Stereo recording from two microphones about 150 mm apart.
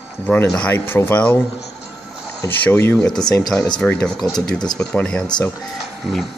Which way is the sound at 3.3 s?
25° left (ahead or behind).